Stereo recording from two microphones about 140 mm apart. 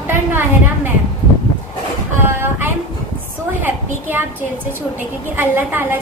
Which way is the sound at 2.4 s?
15° right (ahead or behind).